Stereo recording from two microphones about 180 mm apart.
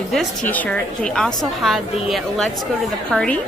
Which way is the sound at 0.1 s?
5° left (ahead or behind).